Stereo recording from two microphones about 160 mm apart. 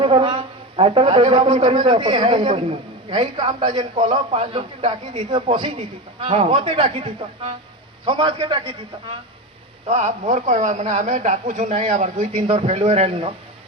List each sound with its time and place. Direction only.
0.0 s a man's voice: 30° right (ahead or behind)
9.8 s a man's voice: 45° right (ahead or behind)
12.5 s a man's voice: 40° right (ahead or behind)